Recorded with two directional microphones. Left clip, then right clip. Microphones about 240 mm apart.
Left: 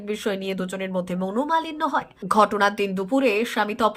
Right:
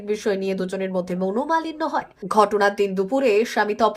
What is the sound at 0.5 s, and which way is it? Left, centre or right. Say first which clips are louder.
A woman's voice: right 3 dB; left.